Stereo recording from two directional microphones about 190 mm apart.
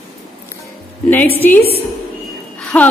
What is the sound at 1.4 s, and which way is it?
Speech, 10° left (ahead or behind).